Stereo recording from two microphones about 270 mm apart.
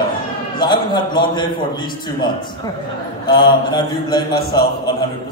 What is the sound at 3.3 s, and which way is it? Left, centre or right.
A man's voice, centre.